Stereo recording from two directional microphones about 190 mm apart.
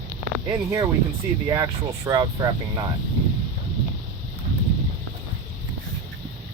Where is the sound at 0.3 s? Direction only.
15° right (ahead or behind).